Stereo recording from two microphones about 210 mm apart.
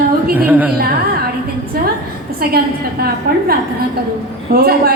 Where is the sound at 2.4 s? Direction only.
45° right (ahead or behind).